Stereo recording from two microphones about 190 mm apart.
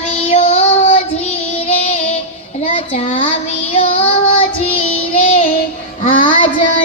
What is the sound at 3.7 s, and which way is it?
Child singing, 30° left (ahead or behind).